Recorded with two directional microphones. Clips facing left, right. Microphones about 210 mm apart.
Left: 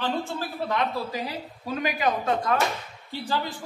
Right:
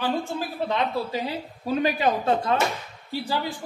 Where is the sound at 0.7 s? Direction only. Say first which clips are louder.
Right 1 dB; 25° right (ahead or behind).